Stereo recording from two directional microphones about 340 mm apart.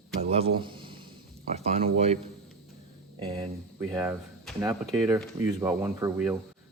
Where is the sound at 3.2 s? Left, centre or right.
Centre.